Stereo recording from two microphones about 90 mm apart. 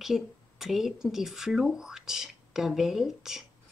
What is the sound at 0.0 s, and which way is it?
Speech, 5° right (ahead or behind).